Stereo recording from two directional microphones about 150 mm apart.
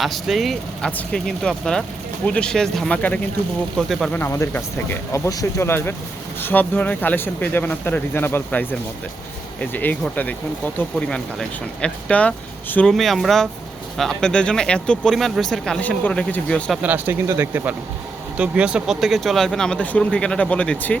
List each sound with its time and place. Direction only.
0.0 s speech: centre (ahead or behind)
4.2 s speech: 15° left (ahead or behind)
16.8 s speech: 15° right (ahead or behind); by 20.9 s 10° left (ahead or behind)